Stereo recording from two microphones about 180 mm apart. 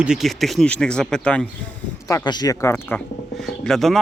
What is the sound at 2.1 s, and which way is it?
Speech, 20° left (ahead or behind).